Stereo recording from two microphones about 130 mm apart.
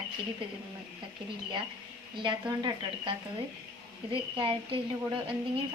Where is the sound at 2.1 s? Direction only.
35° right (ahead or behind).